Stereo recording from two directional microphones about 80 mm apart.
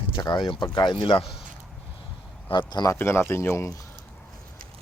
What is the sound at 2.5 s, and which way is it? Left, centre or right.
Speech, left.